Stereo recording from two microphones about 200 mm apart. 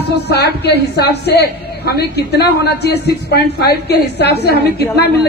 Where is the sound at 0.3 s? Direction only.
55° left (ahead or behind).